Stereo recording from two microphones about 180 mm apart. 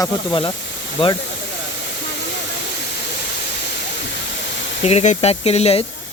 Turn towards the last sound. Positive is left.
turn(degrees=35)  # may be behind; listen again after turning